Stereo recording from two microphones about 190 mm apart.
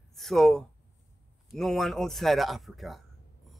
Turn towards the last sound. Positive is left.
turn(degrees=0)  # may be behind; listen again after turning